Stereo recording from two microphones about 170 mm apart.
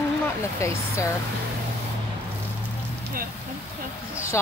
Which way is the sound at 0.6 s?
15° left (ahead or behind).